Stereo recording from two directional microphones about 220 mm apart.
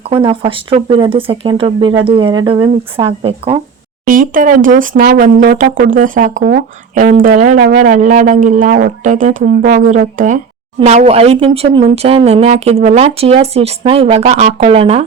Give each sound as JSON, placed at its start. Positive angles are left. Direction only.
{"t": 0.1, "sound": "speech", "side_deg": -25}
{"t": 4.0, "sound": "speech", "side_deg": -40}